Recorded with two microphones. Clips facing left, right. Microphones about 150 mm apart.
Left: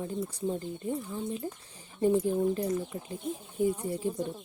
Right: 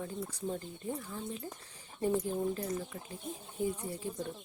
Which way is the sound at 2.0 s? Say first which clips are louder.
Left 6 dB; 25° left (ahead or behind).